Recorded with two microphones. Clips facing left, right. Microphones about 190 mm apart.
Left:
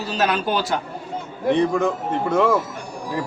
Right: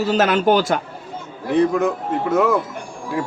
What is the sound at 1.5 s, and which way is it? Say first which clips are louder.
Speech: right 3 dB; 5° right (ahead or behind).